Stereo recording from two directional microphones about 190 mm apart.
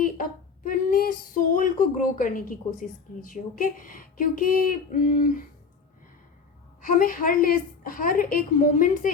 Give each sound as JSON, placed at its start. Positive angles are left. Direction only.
{"t": 0.0, "sound": "a sound", "side_deg": 45}
{"t": 3.2, "sound": "a woman's voice", "side_deg": 45}
{"t": 6.8, "sound": "a woman's voice", "side_deg": 45}